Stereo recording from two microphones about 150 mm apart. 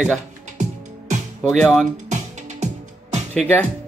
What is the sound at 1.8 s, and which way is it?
Music, 50° right (ahead or behind).